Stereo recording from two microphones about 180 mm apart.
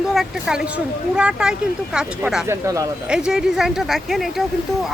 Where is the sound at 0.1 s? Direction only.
Centre (ahead or behind).